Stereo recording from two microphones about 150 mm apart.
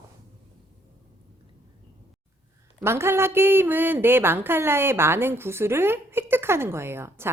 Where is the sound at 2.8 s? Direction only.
15° right (ahead or behind).